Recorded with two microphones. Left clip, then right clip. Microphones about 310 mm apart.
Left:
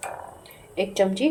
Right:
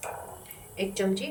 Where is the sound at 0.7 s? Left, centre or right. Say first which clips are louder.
Left 6 dB; centre.